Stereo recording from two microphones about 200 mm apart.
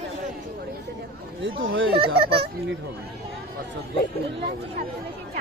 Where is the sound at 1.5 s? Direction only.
65° right (ahead or behind).